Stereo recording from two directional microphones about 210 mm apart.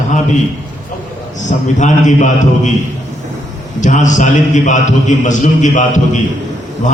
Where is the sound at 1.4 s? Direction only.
35° left (ahead or behind).